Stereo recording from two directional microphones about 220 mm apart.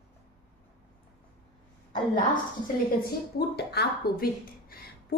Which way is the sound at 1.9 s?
35° left (ahead or behind).